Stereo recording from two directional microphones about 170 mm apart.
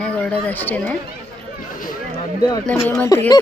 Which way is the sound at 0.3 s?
10° left (ahead or behind).